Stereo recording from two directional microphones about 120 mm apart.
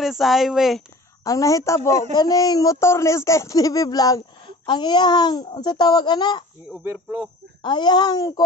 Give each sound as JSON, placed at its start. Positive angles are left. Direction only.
{"t": 0.0, "sound": "speech", "side_deg": 0}
{"t": 1.2, "sound": "speech", "side_deg": 30}
{"t": 1.8, "sound": "speech", "side_deg": -70}
{"t": 2.1, "sound": "speech", "side_deg": 35}
{"t": 6.7, "sound": "speech", "side_deg": -10}
{"t": 7.6, "sound": "speech", "side_deg": 35}